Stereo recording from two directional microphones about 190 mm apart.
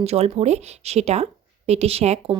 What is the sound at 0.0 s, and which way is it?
A woman's voice, 35° right (ahead or behind).